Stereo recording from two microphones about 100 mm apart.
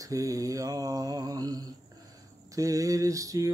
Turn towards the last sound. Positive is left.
turn(degrees=-35)  # may be behind; listen again after turning